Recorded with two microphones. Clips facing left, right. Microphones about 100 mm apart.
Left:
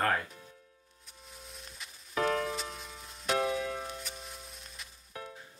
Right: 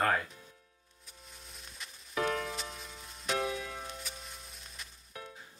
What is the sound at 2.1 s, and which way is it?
Music, 40° left (ahead or behind).